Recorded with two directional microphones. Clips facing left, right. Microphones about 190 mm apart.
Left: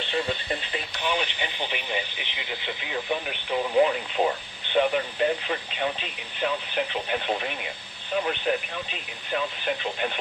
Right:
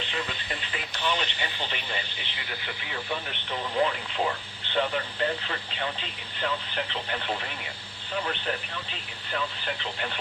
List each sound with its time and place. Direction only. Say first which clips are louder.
0.1 s radio: left 6 dB; 30° left (ahead or behind)
1.0 s speech: left 1 dB; 15° left (ahead or behind)